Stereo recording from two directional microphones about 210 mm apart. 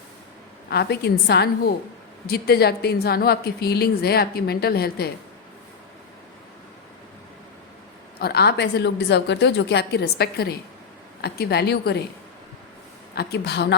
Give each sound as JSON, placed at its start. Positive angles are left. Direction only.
{"t": 0.7, "sound": "a woman's voice", "side_deg": 50}
{"t": 8.2, "sound": "a woman's voice", "side_deg": 50}
{"t": 13.1, "sound": "a woman's voice", "side_deg": 50}